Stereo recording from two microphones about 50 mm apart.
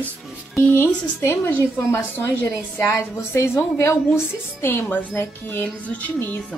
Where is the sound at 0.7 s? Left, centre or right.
Left.